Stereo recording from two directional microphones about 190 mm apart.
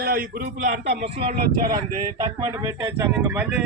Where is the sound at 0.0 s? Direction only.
50° right (ahead or behind).